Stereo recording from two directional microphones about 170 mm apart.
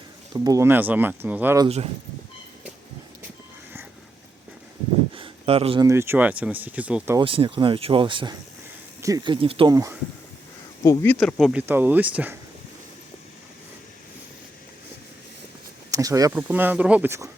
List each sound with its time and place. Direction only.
0.3 s speech: 20° right (ahead or behind)
5.1 s a sound: 35° right (ahead or behind)
5.8 s speech: 15° right (ahead or behind)
7.2 s speech: 30° right (ahead or behind)
9.7 s speech: 20° right (ahead or behind)
10.8 s speech: 10° left (ahead or behind)
11.7 s speech: 10° right (ahead or behind)
15.9 s speech: 20° right (ahead or behind)